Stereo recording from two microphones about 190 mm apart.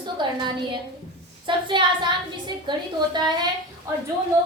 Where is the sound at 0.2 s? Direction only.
25° right (ahead or behind).